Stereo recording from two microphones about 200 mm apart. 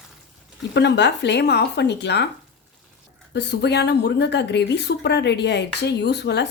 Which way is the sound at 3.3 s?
60° left (ahead or behind).